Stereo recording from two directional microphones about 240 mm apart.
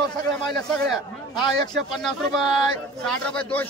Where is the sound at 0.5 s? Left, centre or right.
Centre.